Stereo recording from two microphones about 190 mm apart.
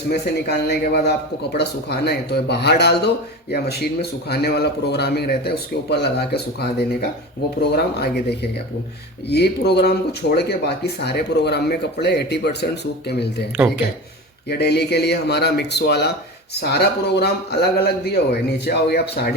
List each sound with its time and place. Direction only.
0.1 s speech: 60° left (ahead or behind)
14.4 s speech: 60° left (ahead or behind)